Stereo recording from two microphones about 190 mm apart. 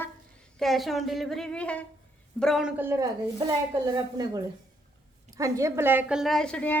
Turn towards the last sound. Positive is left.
turn(degrees=5)  # may be behind; listen again after turning